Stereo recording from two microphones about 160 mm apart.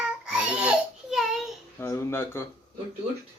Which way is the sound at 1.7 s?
15° left (ahead or behind).